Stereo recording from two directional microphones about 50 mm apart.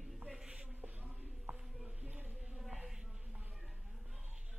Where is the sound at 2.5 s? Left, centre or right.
Centre.